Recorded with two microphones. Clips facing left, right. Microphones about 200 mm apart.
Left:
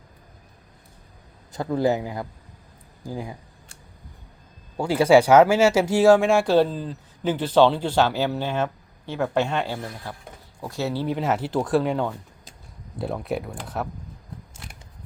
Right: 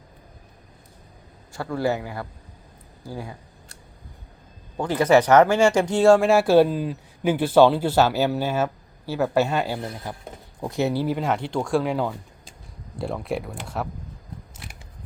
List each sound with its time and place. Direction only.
1.5 s a man's voice: 20° left (ahead or behind)
4.8 s speech: 10° left (ahead or behind); by 9.8 s 5° right (ahead or behind)
9.8 s speech: 20° right (ahead or behind)
11.0 s speech: centre (ahead or behind)